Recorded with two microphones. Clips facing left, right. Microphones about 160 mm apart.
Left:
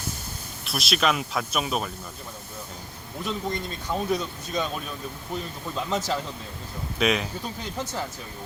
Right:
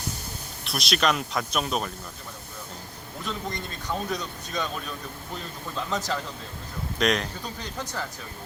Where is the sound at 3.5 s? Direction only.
10° left (ahead or behind).